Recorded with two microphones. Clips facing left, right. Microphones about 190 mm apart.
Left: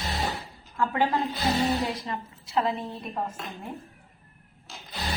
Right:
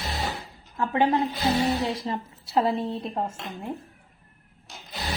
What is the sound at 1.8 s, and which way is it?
A woman's voice, 25° right (ahead or behind).